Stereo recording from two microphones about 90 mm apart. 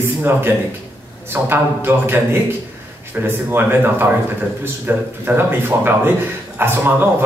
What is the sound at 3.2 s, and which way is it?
A man's voice, 25° right (ahead or behind).